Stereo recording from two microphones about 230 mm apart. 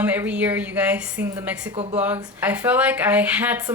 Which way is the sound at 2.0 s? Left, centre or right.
Centre.